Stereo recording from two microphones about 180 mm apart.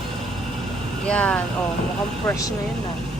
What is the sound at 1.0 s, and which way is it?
Speech, 5° left (ahead or behind).